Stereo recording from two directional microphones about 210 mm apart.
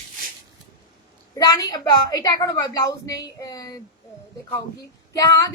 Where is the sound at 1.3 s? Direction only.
15° left (ahead or behind).